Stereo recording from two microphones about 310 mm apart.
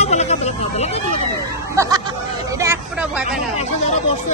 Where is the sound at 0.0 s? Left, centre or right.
Left.